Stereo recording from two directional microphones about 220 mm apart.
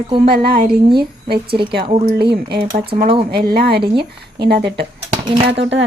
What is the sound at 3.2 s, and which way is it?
A woman's voice, 45° right (ahead or behind).